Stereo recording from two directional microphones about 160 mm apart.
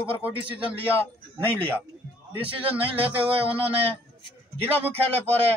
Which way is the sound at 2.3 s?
35° right (ahead or behind).